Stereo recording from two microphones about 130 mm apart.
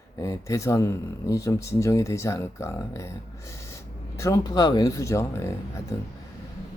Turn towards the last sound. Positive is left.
turn(degrees=20)  # may be behind; listen again after turning